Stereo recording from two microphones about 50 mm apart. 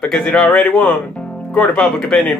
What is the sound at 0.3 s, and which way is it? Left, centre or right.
Speech, left.